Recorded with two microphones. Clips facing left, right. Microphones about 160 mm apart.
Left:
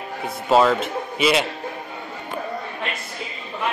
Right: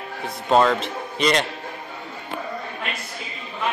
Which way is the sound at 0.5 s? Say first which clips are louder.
Left 1 dB; 5° left (ahead or behind).